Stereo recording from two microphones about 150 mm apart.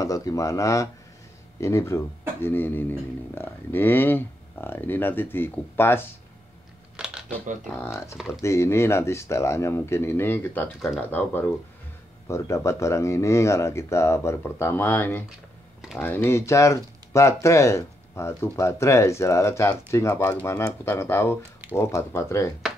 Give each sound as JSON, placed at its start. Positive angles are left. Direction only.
{"t": 0.0, "sound": "speech", "side_deg": 25}
{"t": 7.7, "sound": "speech", "side_deg": 15}